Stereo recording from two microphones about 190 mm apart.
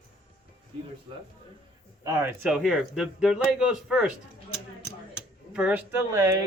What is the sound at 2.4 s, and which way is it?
Speech, centre (ahead or behind).